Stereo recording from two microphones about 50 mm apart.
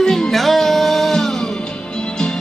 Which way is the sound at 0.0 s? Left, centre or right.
Centre.